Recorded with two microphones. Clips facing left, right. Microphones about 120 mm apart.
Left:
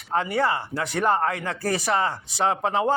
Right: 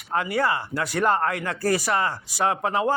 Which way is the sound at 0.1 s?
30° left (ahead or behind).